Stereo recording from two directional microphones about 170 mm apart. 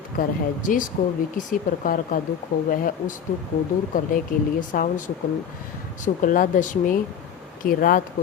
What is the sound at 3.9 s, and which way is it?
Speech, 50° left (ahead or behind).